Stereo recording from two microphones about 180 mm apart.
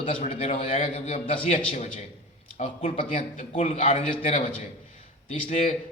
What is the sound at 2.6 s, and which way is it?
A man's voice, 45° left (ahead or behind).